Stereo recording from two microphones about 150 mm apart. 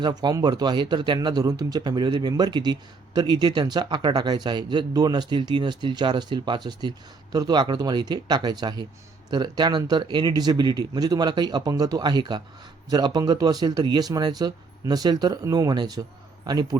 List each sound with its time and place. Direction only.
0.0 s speech: 25° right (ahead or behind)